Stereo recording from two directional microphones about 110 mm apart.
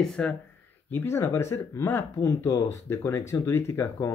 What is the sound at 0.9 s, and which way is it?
Speech, 20° left (ahead or behind).